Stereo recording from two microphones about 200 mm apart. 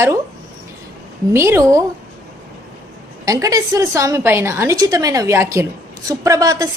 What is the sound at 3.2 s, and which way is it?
A woman's voice, 15° right (ahead or behind).